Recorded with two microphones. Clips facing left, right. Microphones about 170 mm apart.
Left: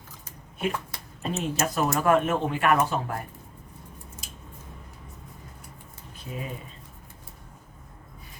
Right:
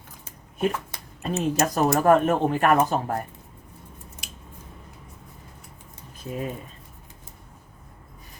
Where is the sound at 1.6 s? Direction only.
40° right (ahead or behind).